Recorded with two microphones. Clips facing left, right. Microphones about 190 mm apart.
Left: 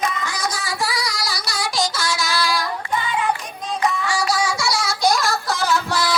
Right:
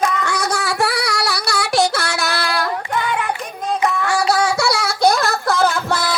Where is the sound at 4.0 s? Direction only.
60° right (ahead or behind).